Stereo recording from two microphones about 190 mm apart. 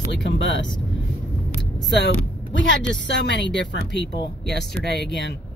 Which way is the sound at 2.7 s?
65° left (ahead or behind).